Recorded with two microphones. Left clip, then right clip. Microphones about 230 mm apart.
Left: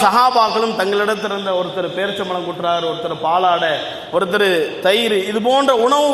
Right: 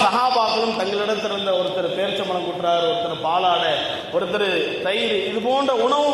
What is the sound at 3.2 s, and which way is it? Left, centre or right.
A man's voice, left.